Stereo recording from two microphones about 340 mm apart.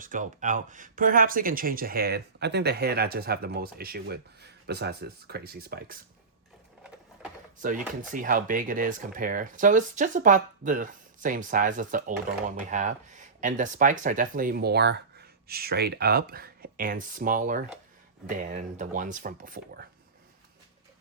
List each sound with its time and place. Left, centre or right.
0.0 s speech: right
7.6 s speech: right